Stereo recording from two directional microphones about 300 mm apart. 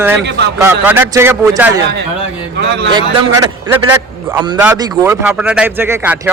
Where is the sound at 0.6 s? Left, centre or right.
Centre.